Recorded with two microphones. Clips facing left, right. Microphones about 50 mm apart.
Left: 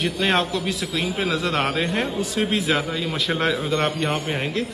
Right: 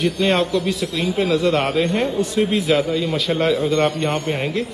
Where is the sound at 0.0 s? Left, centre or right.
Centre.